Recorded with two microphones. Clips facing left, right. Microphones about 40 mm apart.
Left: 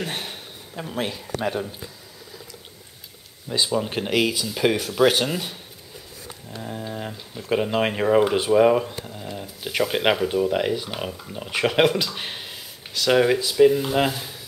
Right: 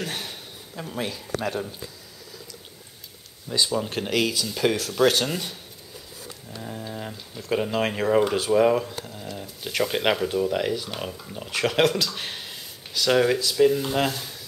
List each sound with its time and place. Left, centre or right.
0.0 s speech: centre
3.4 s speech: centre
6.6 s speech: centre